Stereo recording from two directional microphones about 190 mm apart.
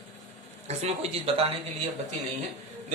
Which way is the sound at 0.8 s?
30° right (ahead or behind).